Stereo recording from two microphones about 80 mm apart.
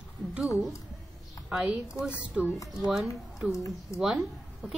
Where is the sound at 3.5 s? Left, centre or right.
Left.